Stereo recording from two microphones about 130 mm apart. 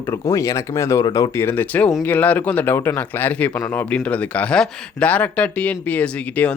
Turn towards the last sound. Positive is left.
turn(degrees=10)  # may be behind; listen again after turning